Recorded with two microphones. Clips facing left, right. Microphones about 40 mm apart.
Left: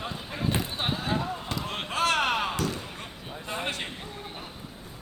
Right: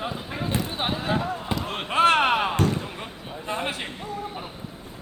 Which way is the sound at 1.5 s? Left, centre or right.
Centre.